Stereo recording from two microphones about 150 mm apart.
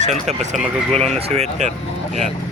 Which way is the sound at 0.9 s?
5° left (ahead or behind).